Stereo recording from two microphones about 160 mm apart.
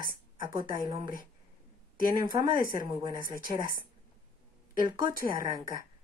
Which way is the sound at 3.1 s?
60° left (ahead or behind).